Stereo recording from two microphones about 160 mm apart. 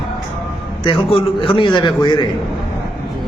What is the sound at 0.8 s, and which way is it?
A man's voice, 35° left (ahead or behind).